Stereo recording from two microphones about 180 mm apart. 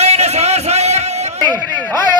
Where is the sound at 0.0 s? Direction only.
35° right (ahead or behind).